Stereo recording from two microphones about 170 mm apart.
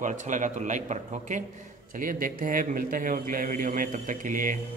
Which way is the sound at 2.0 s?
55° right (ahead or behind).